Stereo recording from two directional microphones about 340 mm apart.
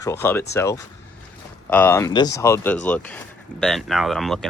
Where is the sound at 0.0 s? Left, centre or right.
Centre.